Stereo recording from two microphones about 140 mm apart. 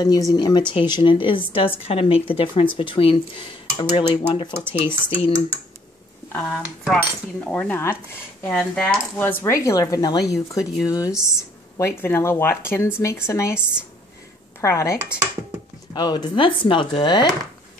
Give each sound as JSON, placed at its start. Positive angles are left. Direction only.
{"t": 0.0, "sound": "speech", "side_deg": 30}
{"t": 4.6, "sound": "speech", "side_deg": -15}
{"t": 5.1, "sound": "speech", "side_deg": 40}
{"t": 6.5, "sound": "cutlery", "side_deg": 5}
{"t": 11.7, "sound": "speech", "side_deg": 20}
{"t": 14.6, "sound": "speech", "side_deg": 20}
{"t": 15.9, "sound": "speech", "side_deg": 30}